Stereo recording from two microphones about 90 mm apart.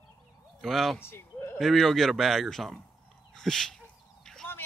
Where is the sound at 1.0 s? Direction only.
30° left (ahead or behind).